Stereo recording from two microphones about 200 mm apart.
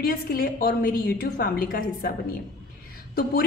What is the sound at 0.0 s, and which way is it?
A woman's voice, 45° left (ahead or behind).